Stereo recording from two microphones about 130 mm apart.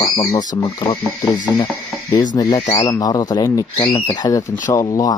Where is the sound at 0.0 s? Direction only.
30° left (ahead or behind).